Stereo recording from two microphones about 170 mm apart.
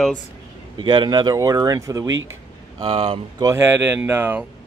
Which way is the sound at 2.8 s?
35° right (ahead or behind).